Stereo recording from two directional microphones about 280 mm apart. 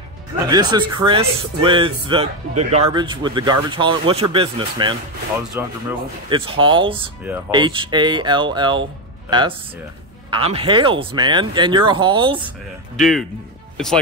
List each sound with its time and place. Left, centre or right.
0.5 s speech: centre
13.0 s speech: centre